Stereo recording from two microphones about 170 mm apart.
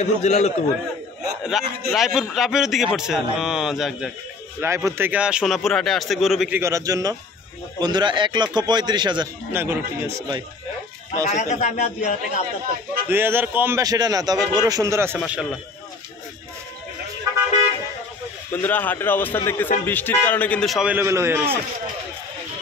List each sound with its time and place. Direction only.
0.0 s a man's voice: 40° left (ahead or behind)
1.6 s a man's voice: centre (ahead or behind)
4.6 s a man's voice: 15° right (ahead or behind)
6.6 s a man's voice: 20° right (ahead or behind)
9.5 s a man's voice: 15° right (ahead or behind)
11.2 s speech: 40° left (ahead or behind)
13.1 s a man's voice: 15° right (ahead or behind)
15.1 s a man's voice: 5° right (ahead or behind)
18.5 s a man's voice: 10° left (ahead or behind); by 21.5 s 15° right (ahead or behind)